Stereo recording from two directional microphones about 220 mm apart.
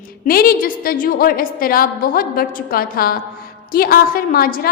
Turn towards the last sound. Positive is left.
turn(degrees=40)  # may be behind; listen again after turning